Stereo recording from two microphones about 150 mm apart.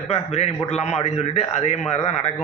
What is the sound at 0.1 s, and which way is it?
Speech, 45° left (ahead or behind).